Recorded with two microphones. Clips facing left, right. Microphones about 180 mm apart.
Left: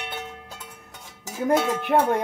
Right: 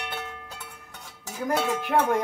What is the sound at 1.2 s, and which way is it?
Music, 15° left (ahead or behind).